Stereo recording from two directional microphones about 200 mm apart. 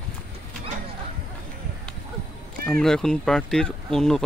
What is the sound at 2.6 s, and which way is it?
Speech, 5° left (ahead or behind).